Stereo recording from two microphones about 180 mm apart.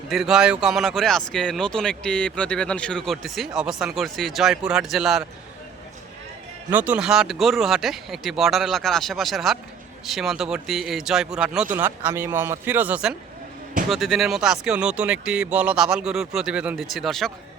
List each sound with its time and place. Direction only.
0.1 s speech: centre (ahead or behind)
6.7 s speech: 10° right (ahead or behind)